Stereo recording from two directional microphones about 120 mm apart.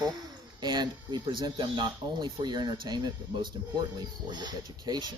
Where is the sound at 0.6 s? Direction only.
35° right (ahead or behind).